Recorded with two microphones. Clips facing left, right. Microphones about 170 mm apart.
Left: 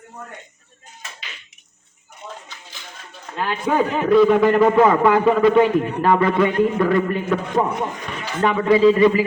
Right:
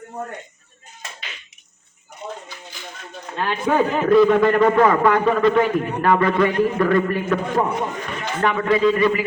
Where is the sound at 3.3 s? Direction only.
5° left (ahead or behind).